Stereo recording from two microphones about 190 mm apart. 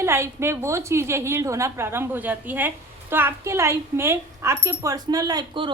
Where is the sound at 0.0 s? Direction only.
15° right (ahead or behind).